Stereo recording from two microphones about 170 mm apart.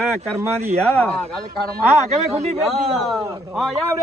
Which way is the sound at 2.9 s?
Centre (ahead or behind).